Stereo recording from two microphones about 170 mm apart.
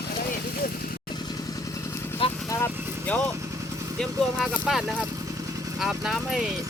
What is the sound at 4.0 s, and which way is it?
Speech, 5° left (ahead or behind).